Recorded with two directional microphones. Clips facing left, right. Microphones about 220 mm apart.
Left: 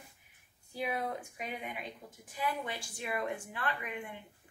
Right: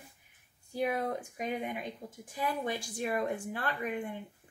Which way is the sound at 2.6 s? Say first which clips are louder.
Right 6 dB; 40° right (ahead or behind).